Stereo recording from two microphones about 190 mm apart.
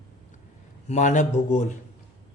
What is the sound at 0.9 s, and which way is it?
Speech, 40° left (ahead or behind).